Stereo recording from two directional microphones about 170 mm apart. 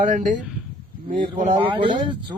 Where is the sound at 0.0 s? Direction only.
50° right (ahead or behind).